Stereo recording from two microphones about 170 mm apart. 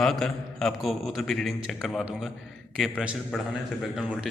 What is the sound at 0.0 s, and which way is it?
A man's voice, centre (ahead or behind).